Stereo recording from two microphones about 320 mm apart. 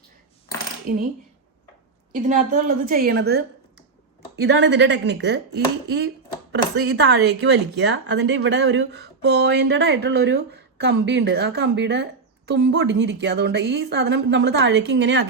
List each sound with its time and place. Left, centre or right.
2.2 s a woman's voice: right
4.4 s speech: right